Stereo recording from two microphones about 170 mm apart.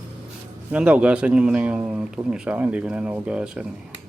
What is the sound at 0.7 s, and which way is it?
Speech, 10° right (ahead or behind).